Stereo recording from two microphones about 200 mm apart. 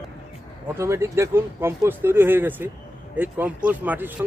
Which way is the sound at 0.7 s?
15° right (ahead or behind).